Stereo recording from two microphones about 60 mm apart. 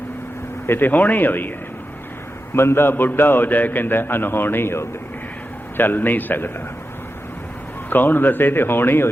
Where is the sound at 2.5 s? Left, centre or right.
Left.